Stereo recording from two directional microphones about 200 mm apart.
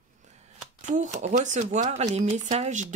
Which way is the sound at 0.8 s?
35° right (ahead or behind).